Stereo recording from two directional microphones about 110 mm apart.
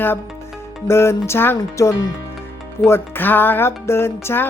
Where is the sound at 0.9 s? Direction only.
25° left (ahead or behind).